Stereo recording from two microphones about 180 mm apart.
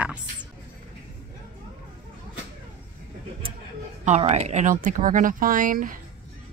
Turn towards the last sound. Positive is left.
turn(degrees=-50)  # may be behind; listen again after turning